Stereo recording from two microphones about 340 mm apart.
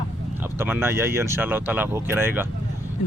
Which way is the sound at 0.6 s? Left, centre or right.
Centre.